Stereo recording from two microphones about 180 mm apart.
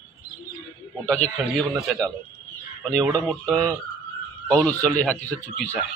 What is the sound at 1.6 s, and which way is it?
Speech, centre (ahead or behind).